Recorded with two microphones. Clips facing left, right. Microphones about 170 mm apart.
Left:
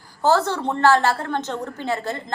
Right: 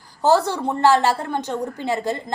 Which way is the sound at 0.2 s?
15° right (ahead or behind).